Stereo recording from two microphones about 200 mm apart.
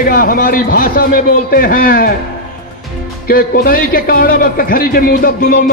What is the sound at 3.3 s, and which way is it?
A man's voice, 45° left (ahead or behind).